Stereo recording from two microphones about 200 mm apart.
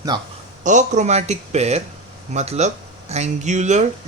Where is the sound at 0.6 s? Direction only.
40° right (ahead or behind).